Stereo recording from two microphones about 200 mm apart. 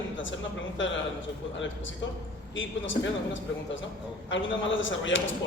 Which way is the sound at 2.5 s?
70° left (ahead or behind).